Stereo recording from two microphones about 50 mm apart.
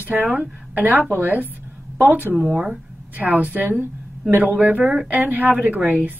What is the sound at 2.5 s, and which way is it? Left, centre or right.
Speech, centre.